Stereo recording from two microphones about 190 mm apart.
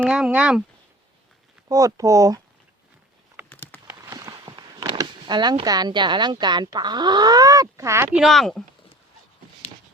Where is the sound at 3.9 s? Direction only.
15° right (ahead or behind).